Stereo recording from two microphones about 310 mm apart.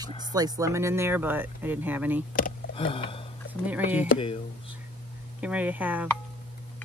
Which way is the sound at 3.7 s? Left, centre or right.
Centre.